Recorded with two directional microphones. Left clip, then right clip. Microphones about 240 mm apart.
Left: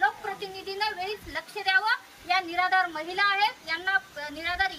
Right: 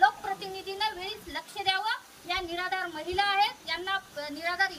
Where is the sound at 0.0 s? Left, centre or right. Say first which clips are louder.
Right 2 dB; centre.